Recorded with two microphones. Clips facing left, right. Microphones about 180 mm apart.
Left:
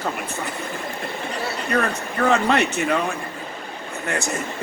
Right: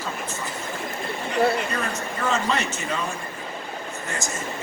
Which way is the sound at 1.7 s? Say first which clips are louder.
Left 5 dB; 60° left (ahead or behind).